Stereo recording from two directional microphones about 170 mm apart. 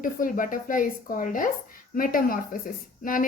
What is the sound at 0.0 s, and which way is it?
Speech, 55° left (ahead or behind).